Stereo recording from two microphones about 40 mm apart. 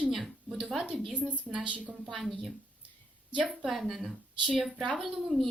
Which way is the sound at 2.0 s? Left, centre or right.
Centre.